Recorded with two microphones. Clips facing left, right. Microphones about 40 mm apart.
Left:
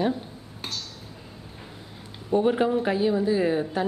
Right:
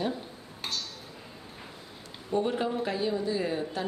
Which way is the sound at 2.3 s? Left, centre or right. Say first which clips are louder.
Left 6 dB; centre.